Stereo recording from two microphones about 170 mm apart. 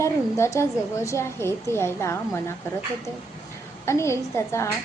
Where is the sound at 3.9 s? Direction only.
15° left (ahead or behind).